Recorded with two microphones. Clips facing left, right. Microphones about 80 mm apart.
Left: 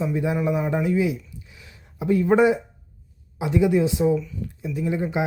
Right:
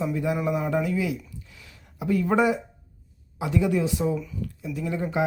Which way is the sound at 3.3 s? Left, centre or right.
Left.